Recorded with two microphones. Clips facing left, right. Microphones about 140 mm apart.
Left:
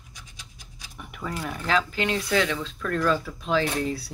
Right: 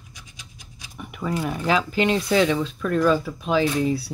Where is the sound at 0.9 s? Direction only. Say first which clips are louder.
Right 6 dB; 5° right (ahead or behind).